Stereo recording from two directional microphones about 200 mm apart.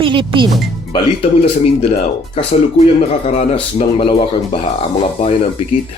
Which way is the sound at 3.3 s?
35° left (ahead or behind).